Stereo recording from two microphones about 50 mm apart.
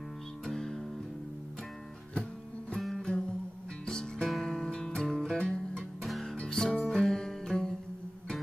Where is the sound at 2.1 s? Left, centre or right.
Centre.